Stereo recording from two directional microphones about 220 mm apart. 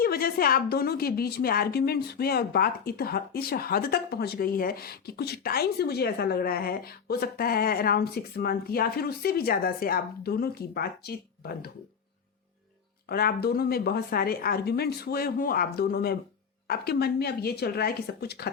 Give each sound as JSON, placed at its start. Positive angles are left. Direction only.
{"t": 0.0, "sound": "a woman's voice", "side_deg": 45}
{"t": 13.1, "sound": "a woman's voice", "side_deg": 45}